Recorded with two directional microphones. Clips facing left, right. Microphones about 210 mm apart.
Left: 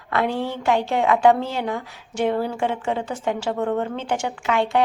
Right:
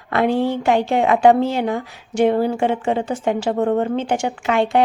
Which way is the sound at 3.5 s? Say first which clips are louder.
Right 6 dB; 35° right (ahead or behind).